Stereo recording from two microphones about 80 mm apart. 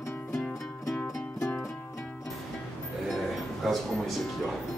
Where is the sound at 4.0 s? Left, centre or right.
Centre.